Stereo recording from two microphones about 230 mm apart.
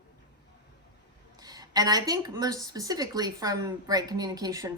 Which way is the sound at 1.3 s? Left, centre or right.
Centre.